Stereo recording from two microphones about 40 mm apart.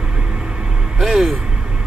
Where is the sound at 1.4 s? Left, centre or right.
Right.